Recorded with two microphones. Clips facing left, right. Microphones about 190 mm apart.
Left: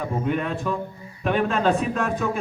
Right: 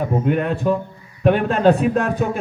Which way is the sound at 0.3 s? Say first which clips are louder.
Right 6 dB; 45° right (ahead or behind).